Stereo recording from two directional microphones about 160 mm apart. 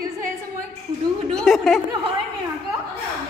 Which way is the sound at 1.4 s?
Centre (ahead or behind).